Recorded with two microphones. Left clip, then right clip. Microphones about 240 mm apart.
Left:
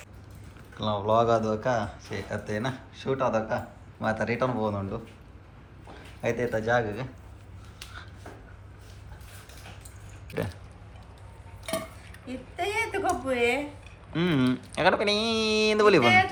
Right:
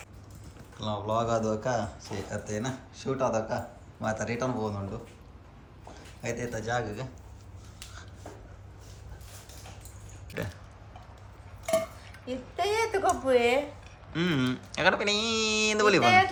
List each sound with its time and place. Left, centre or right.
0.8 s a man's voice: centre
10.3 s burping: centre
12.5 s a sound: right
14.1 s speech: centre